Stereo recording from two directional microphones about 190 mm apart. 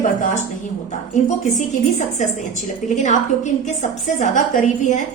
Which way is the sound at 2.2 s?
40° left (ahead or behind).